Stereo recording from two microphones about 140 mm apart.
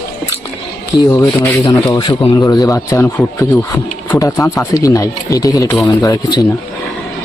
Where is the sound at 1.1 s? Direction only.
20° left (ahead or behind).